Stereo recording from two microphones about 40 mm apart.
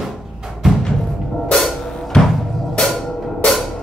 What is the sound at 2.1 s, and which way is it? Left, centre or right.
Music, centre.